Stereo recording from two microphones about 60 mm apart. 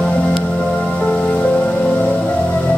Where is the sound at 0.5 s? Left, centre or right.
Centre.